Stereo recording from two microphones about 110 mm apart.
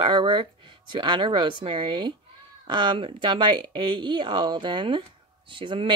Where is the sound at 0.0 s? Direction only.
45° right (ahead or behind).